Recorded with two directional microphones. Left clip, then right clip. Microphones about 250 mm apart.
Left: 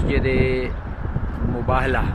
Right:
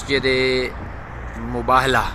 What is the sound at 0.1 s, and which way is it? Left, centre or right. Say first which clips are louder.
Speech: right 4 dB; centre.